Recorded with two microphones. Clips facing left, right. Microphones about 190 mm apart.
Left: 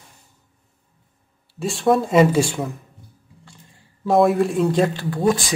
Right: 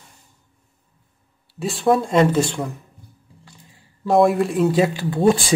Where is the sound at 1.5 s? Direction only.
Centre (ahead or behind).